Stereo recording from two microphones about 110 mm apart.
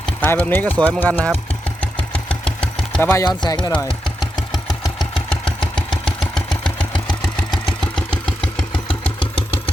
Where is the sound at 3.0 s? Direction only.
20° left (ahead or behind).